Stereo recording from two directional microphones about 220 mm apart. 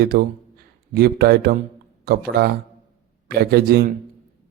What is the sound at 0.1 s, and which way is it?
A man's voice, 40° right (ahead or behind).